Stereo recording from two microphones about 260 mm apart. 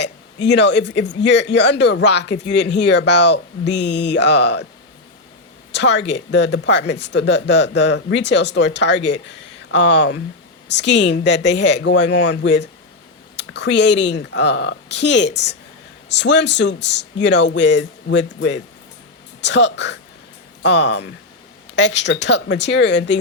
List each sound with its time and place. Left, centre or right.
0.0 s speech: left
5.7 s speech: left